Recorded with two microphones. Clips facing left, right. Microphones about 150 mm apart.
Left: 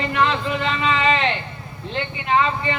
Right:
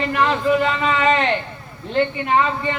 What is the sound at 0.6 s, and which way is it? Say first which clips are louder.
A man's voice: right 2 dB; 45° right (ahead or behind).